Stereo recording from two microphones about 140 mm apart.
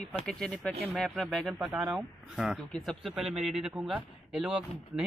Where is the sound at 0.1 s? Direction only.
5° left (ahead or behind).